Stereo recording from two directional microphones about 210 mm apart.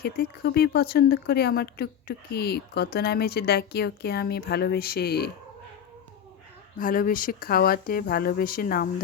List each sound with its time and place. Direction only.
0.0 s speech: 45° left (ahead or behind)
6.7 s speech: 40° left (ahead or behind)